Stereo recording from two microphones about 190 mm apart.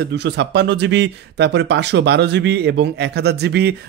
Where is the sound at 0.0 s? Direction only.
65° right (ahead or behind).